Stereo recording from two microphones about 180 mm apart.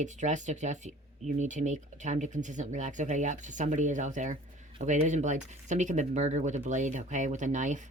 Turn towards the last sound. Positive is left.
turn(degrees=-45)  # may be behind; listen again after turning